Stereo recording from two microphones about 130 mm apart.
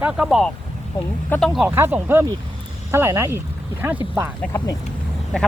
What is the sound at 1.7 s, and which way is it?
Speech, 15° right (ahead or behind).